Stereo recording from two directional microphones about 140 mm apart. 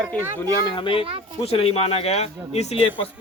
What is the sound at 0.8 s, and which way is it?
Speech, 40° left (ahead or behind).